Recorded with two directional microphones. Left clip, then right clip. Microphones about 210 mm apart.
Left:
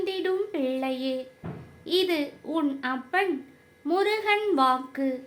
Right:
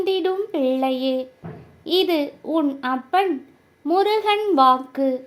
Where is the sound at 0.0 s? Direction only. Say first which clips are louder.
Right 6 dB; 30° right (ahead or behind).